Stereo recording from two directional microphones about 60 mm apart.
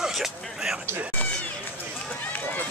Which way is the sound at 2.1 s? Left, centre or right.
Left.